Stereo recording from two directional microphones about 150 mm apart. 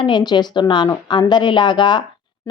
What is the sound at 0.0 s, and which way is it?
A woman's voice, 30° left (ahead or behind).